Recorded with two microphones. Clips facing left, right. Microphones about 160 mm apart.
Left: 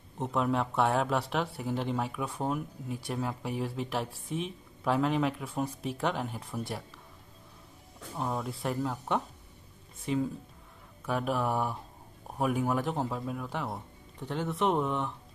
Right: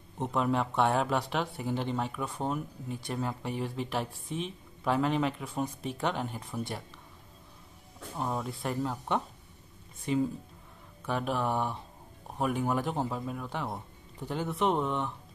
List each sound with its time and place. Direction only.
0.2 s speech: centre (ahead or behind)
8.2 s speech: centre (ahead or behind)